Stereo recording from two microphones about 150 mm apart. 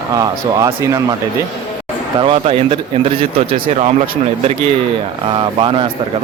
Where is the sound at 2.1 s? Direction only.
35° right (ahead or behind).